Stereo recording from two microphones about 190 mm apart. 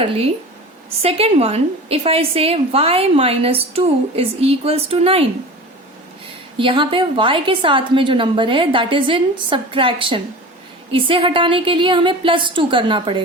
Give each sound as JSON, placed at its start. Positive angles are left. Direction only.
{"t": 0.0, "sound": "a woman's voice", "side_deg": -30}
{"t": 6.6, "sound": "a woman's voice", "side_deg": -25}